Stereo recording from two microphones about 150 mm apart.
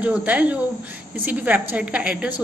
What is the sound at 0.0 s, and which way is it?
A woman's voice, 10° right (ahead or behind).